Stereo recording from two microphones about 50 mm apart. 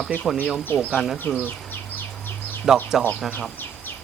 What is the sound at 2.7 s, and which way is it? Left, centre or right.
Speech, centre.